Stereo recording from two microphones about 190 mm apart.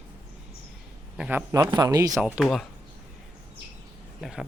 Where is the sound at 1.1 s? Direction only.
10° right (ahead or behind).